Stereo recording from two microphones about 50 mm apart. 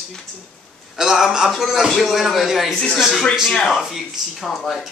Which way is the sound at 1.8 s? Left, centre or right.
Centre.